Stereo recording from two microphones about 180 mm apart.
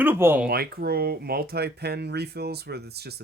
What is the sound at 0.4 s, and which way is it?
Speech, 60° right (ahead or behind).